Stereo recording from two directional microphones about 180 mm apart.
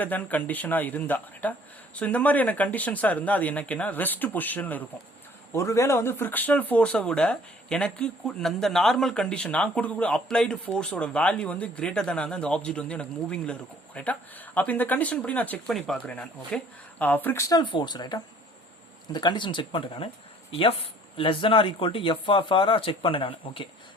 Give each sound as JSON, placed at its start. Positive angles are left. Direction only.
{"t": 0.0, "sound": "speech", "side_deg": 10}